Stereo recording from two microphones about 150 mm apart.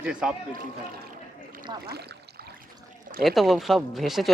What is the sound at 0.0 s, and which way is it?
Speech, 5° right (ahead or behind).